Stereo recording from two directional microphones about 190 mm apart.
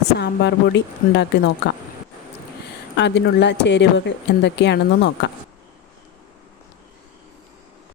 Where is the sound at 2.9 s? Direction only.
65° left (ahead or behind).